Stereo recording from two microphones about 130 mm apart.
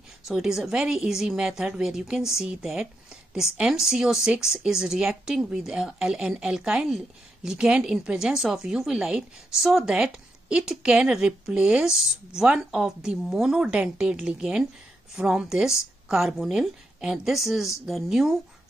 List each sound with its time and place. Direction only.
0.3 s a woman's voice: 5° right (ahead or behind)